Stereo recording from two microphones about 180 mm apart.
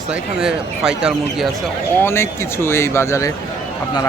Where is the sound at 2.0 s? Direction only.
15° left (ahead or behind).